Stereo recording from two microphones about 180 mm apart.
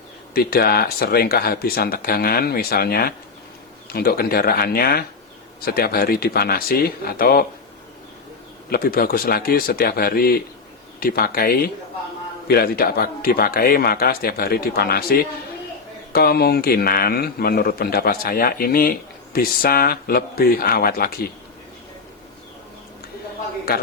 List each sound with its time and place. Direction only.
0.3 s a man's voice: 60° left (ahead or behind)
8.7 s a man's voice: 55° left (ahead or behind)